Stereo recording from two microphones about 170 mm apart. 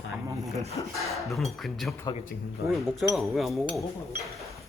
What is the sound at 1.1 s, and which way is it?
A man's voice, centre (ahead or behind).